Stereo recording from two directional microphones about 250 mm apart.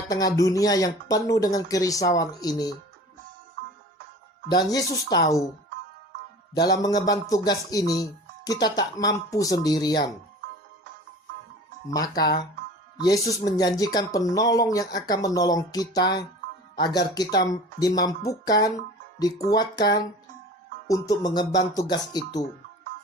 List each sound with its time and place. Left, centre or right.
0.1 s speech: centre
4.4 s speech: centre
6.5 s speech: centre
11.9 s speech: centre